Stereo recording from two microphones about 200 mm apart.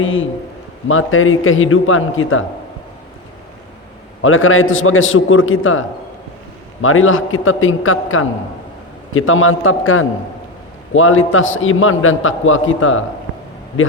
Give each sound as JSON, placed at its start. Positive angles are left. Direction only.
{"t": 0.0, "sound": "a man's voice", "side_deg": 80}
{"t": 0.9, "sound": "a man's voice", "side_deg": 90}
{"t": 4.2, "sound": "a man's voice", "side_deg": 85}
{"t": 6.8, "sound": "a man's voice", "side_deg": 90}